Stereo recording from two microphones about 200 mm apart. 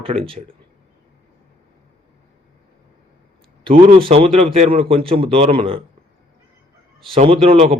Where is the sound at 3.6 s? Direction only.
25° right (ahead or behind).